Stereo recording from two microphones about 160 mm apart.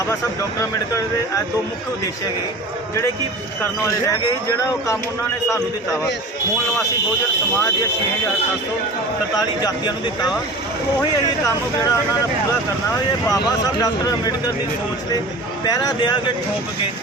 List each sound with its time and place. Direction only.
3.6 s speech: 20° left (ahead or behind)
9.6 s speech: 25° left (ahead or behind)
11.4 s speech: 20° left (ahead or behind)
13.2 s speech: 20° left (ahead or behind)
15.6 s speech: 25° left (ahead or behind)